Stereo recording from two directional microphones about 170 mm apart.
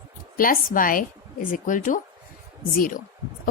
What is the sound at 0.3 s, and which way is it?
A woman's voice, 55° left (ahead or behind).